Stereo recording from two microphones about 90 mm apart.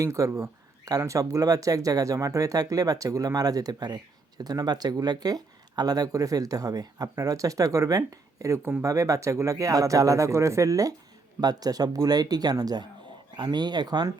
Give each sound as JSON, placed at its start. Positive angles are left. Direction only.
{"t": 0.0, "sound": "speech", "side_deg": -35}